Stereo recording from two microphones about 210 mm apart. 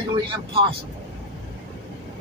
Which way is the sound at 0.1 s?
25° right (ahead or behind).